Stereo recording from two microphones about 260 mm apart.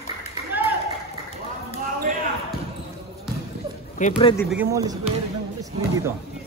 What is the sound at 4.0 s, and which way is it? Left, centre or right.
Speech, left.